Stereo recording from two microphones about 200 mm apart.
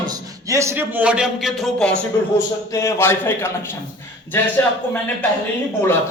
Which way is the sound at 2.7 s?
15° left (ahead or behind).